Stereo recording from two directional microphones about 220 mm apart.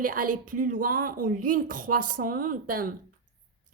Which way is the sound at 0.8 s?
40° right (ahead or behind).